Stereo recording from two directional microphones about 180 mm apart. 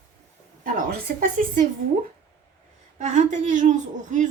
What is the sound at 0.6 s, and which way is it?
Speech, 50° right (ahead or behind).